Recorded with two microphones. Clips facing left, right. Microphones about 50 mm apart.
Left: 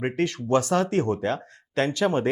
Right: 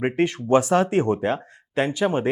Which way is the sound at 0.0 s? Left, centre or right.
Centre.